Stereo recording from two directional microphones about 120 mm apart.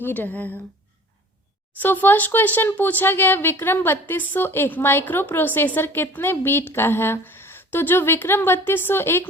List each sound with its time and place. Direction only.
0.0 s speech: 15° left (ahead or behind)
1.8 s speech: 15° left (ahead or behind)